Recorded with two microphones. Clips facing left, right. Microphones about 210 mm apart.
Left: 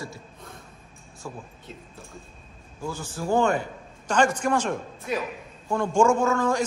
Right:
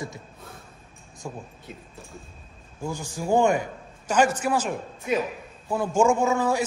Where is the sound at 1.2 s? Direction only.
20° right (ahead or behind).